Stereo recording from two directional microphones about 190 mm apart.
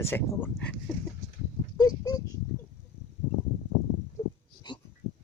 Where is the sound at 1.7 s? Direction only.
20° left (ahead or behind).